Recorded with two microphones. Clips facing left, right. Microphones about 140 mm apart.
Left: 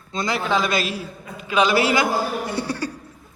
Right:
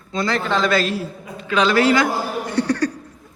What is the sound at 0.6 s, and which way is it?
Speech, 15° left (ahead or behind).